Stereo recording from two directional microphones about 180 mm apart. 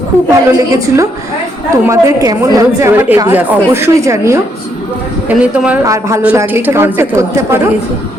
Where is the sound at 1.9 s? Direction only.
20° right (ahead or behind).